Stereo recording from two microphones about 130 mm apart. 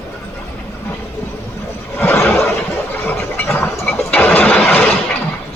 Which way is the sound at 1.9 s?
15° left (ahead or behind).